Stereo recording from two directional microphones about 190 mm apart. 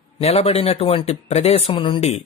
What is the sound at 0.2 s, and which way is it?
Speech, 30° left (ahead or behind).